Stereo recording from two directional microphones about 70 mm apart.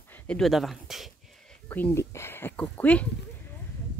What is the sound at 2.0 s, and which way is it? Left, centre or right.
Speech, left.